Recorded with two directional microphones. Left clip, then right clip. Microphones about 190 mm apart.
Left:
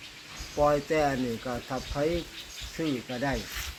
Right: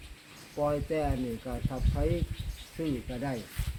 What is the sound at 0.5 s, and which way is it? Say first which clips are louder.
Speech: left 5 dB; 5° left (ahead or behind).